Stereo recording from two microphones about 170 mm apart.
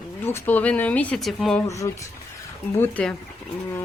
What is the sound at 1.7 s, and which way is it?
Speech, 20° left (ahead or behind).